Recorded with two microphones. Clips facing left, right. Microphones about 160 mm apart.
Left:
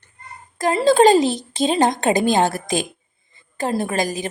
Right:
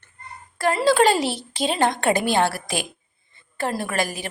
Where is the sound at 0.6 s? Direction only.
20° left (ahead or behind).